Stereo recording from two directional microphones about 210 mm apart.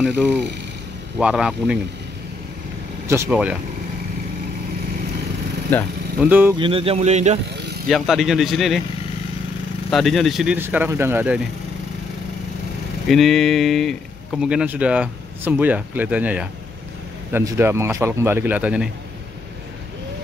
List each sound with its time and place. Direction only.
0.0 s speech: 5° right (ahead or behind)
3.1 s a man's voice: 10° right (ahead or behind)
6.2 s a man's voice: 10° right (ahead or behind)
6.6 s speech: 25° right (ahead or behind)
7.9 s speech: centre (ahead or behind)
9.8 s a man's voice: centre (ahead or behind)
13.1 s a man's voice: centre (ahead or behind)